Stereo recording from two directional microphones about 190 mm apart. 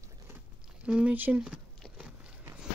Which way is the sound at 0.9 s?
5° right (ahead or behind).